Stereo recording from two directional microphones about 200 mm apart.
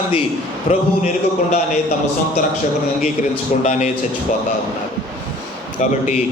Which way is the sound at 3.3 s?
35° left (ahead or behind).